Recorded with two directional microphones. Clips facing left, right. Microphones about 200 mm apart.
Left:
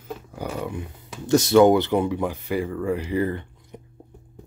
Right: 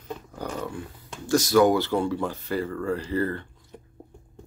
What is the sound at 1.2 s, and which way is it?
Speech, 25° left (ahead or behind).